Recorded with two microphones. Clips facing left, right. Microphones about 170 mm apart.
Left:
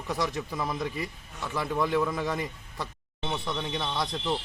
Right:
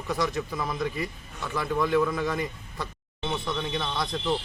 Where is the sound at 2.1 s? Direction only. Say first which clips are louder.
Right 2 dB; 30° left (ahead or behind).